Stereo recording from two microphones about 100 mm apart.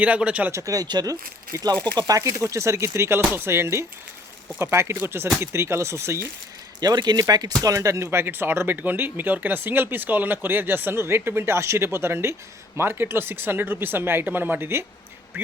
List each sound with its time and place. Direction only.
0.0 s speech: 15° right (ahead or behind)
0.5 s speech: 35° right (ahead or behind)
6.7 s speech: 45° right (ahead or behind); by 14.8 s 25° right (ahead or behind)